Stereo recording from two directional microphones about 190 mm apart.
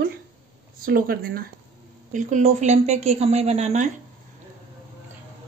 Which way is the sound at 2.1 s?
40° right (ahead or behind).